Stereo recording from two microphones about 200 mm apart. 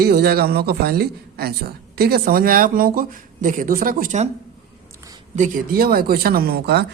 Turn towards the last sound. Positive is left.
turn(degrees=-55)  # may be behind; listen again after turning